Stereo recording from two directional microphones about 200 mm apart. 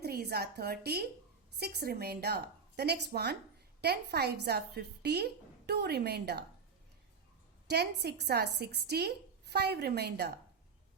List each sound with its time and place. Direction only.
0.0 s a woman's voice: 50° right (ahead or behind)
7.7 s a woman's voice: 55° right (ahead or behind)